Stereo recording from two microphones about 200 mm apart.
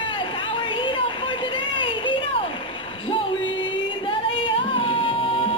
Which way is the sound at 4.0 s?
25° left (ahead or behind).